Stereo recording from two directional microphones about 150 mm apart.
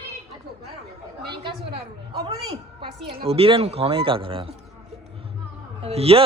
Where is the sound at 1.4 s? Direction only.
30° right (ahead or behind).